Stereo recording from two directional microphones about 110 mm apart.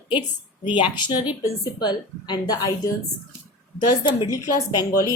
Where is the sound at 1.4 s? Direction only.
35° left (ahead or behind).